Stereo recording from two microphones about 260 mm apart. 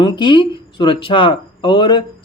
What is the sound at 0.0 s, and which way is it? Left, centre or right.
Speech, centre.